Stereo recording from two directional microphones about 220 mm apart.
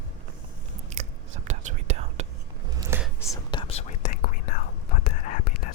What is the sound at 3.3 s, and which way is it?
Whispering, 20° left (ahead or behind).